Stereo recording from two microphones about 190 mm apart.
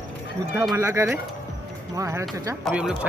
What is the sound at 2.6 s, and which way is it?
Speech, 5° right (ahead or behind).